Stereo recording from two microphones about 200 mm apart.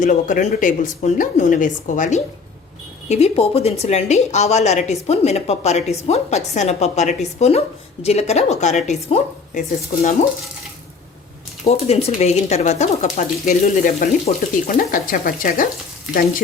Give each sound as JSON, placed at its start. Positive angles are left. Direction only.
{"t": 0.0, "sound": "a woman's voice", "side_deg": 40}
{"t": 11.6, "sound": "a woman's voice", "side_deg": 30}